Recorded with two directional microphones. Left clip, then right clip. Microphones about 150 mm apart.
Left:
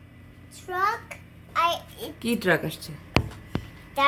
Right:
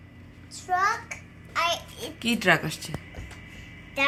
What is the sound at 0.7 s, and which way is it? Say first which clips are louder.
Child singing: right 1 dB; 90° left.